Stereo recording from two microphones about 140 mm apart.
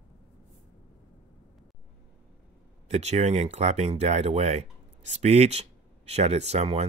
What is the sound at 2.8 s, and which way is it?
Speech, 50° right (ahead or behind).